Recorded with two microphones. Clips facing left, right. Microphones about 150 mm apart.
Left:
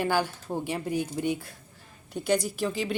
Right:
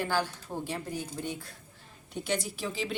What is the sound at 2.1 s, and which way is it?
Speech, centre (ahead or behind).